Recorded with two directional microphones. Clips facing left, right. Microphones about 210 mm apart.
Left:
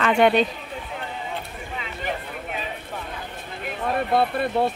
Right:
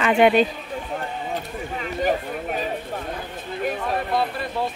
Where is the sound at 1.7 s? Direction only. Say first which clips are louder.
Right 7 dB; 45° right (ahead or behind).